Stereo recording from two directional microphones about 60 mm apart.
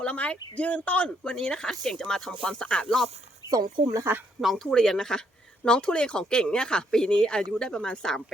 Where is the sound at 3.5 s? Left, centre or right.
Right.